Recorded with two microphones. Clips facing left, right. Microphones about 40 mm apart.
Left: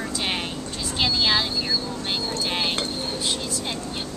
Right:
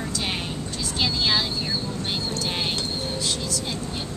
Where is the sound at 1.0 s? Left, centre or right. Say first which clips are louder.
Left 2 dB; centre.